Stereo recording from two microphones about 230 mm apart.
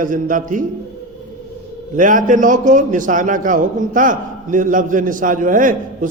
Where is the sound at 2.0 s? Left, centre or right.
Right.